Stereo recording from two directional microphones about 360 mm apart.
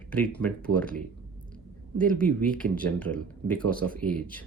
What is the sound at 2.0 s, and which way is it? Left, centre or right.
Speech, centre.